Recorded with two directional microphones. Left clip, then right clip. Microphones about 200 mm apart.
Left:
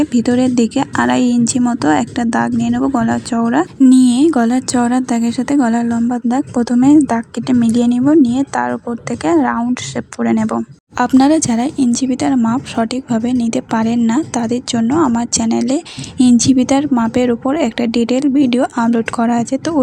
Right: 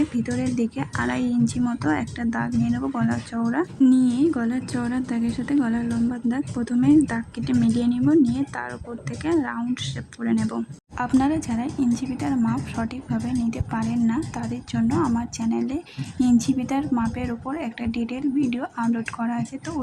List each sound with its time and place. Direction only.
0.0 s speech: 30° left (ahead or behind)